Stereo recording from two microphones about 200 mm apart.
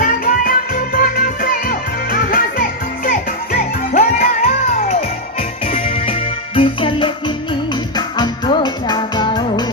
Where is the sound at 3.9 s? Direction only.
35° left (ahead or behind).